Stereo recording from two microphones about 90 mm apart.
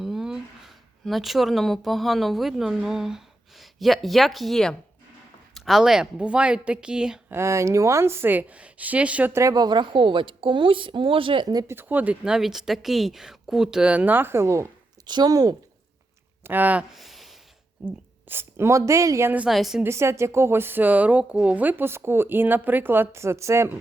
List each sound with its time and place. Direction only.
0.0 s speech: 5° right (ahead or behind)
7.3 s speech: 30° right (ahead or behind); by 9.3 s 15° right (ahead or behind)
9.3 s speech: 35° right (ahead or behind)
9.6 s speech: 55° right (ahead or behind); by 11.4 s 75° right (ahead or behind)
11.7 s speech: 20° right (ahead or behind)
12.2 s speech: 5° right (ahead or behind); by 14.7 s 30° right (ahead or behind)
15.0 s speech: 50° right (ahead or behind)
16.4 s speech: 20° right (ahead or behind)
16.9 s a sound: centre (ahead or behind)
17.8 s a woman's voice: 25° right (ahead or behind)
19.5 s a woman's voice: centre (ahead or behind)
19.8 s speech: 30° right (ahead or behind)